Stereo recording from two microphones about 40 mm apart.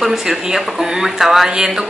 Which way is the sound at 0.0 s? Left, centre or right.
Centre.